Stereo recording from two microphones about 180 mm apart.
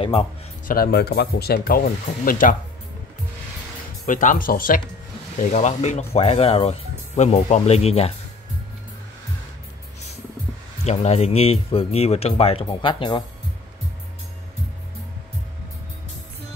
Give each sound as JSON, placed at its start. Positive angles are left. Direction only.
{"t": 0.7, "sound": "speech", "side_deg": 60}
{"t": 4.0, "sound": "speech", "side_deg": 45}
{"t": 10.8, "sound": "speech", "side_deg": 40}